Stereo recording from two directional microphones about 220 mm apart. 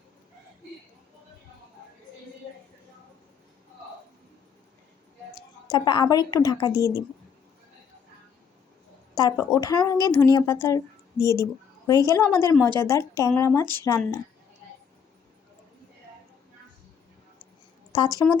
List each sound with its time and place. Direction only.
5.3 s a woman's voice: 20° left (ahead or behind)
9.1 s a woman's voice: 15° left (ahead or behind)
17.9 s speech: 20° left (ahead or behind)